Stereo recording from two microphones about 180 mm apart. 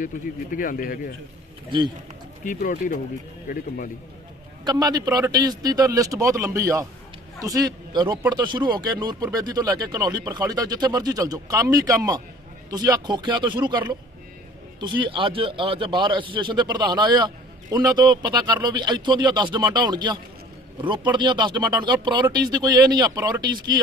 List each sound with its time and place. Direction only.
0.0 s speech: 50° left (ahead or behind)
2.4 s speech: 45° left (ahead or behind)
4.6 s a man's voice: 20° right (ahead or behind)